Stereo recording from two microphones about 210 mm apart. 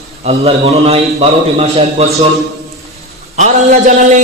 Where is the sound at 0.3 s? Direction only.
30° right (ahead or behind).